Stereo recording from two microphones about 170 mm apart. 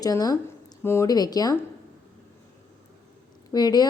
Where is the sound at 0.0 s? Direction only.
20° left (ahead or behind).